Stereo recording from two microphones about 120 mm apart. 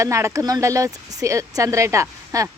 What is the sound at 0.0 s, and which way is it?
Speech, 25° right (ahead or behind).